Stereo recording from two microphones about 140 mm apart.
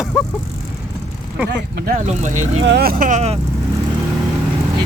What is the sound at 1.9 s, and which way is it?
Speech, 65° right (ahead or behind).